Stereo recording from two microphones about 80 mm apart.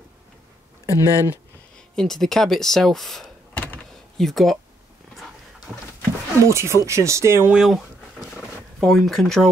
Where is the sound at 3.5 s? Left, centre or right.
Left.